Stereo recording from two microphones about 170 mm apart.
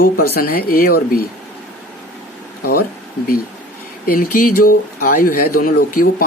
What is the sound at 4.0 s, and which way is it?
Speech, 55° left (ahead or behind).